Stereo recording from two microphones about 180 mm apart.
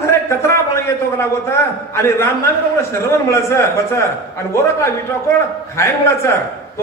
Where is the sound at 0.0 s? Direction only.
15° left (ahead or behind).